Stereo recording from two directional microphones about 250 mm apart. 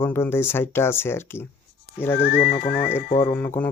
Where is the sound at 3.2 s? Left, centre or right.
Centre.